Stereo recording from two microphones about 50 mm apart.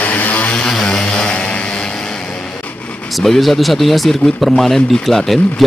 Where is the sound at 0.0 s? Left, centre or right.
Left.